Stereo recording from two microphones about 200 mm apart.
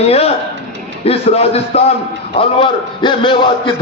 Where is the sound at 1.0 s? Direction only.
30° left (ahead or behind).